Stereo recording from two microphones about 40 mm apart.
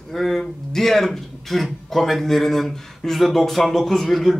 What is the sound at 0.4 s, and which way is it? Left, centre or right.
Speech, centre.